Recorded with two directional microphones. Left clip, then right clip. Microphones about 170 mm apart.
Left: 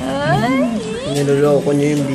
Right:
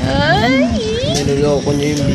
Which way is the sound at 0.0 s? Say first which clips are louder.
Right 3 dB; 5° right (ahead or behind).